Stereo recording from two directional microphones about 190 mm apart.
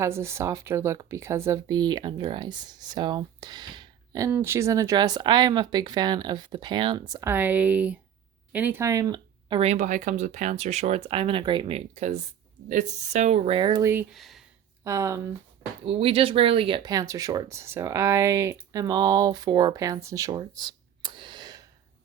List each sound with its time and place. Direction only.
0.0 s speech: 15° right (ahead or behind)
11.9 s speech: 40° right (ahead or behind)
14.1 s speech: centre (ahead or behind)
14.8 s speech: 15° right (ahead or behind)
15.8 s speech: 30° right (ahead or behind)